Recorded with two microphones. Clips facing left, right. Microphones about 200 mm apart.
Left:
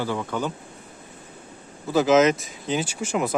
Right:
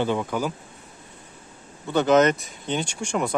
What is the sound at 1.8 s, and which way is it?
Speech, centre (ahead or behind).